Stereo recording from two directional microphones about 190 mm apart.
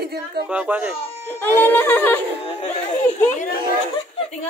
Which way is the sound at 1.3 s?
10° left (ahead or behind).